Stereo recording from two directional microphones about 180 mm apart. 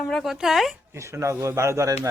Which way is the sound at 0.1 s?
Centre (ahead or behind).